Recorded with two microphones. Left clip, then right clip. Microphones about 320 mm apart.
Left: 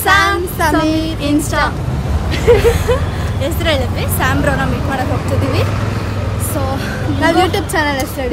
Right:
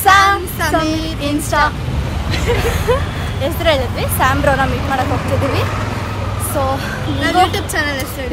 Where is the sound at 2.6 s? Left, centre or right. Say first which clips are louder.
Left 3 dB; centre.